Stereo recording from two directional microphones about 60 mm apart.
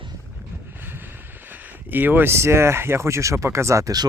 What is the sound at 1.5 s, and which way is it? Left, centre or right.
Speech, right.